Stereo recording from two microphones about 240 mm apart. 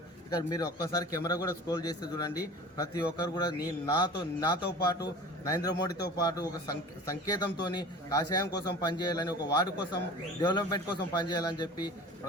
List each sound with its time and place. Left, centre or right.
0.3 s a man's voice: centre